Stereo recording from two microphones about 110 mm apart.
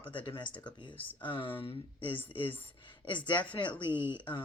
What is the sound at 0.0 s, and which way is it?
Speech, 50° left (ahead or behind).